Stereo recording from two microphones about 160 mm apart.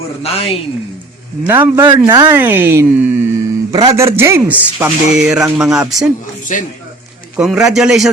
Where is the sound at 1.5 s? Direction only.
15° right (ahead or behind).